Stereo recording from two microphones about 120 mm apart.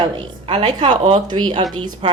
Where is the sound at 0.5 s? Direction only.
45° right (ahead or behind).